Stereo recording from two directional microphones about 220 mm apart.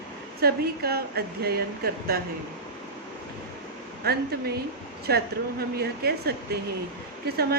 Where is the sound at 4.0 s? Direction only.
45° right (ahead or behind).